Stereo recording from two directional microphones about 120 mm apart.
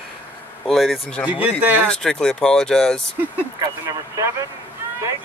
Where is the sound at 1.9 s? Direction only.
5° left (ahead or behind).